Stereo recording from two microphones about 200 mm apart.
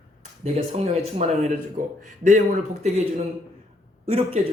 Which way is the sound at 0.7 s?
30° right (ahead or behind).